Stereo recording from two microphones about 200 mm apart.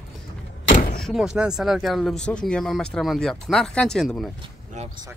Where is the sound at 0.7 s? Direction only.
40° left (ahead or behind).